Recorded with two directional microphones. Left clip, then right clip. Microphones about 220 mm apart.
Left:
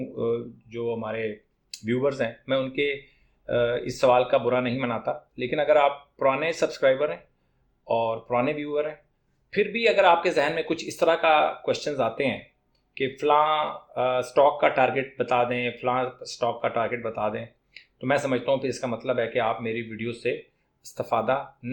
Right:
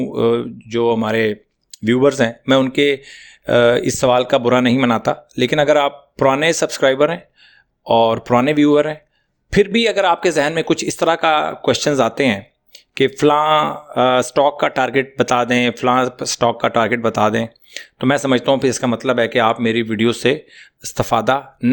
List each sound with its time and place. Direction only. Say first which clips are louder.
0.1 s speech: right 10 dB; 50° right (ahead or behind)